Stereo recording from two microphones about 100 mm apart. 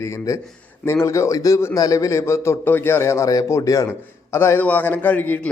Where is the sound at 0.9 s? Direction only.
30° left (ahead or behind).